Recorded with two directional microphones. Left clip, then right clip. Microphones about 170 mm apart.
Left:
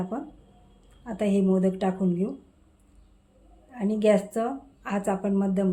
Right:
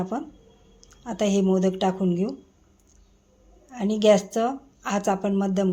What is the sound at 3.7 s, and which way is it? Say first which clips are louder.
A woman's voice: right 4 dB; 25° right (ahead or behind).